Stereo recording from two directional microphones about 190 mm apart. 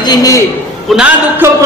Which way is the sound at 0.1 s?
20° left (ahead or behind).